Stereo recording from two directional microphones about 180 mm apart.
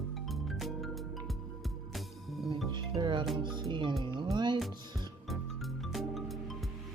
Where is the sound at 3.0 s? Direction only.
25° right (ahead or behind).